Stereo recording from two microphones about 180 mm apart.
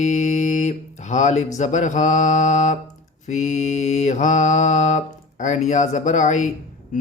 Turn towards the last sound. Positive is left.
turn(degrees=40)  # may be behind; listen again after turning